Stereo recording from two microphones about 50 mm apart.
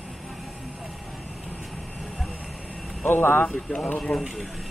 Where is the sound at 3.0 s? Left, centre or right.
Left.